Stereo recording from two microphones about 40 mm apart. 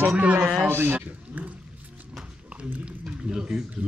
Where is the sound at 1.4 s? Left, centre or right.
Right.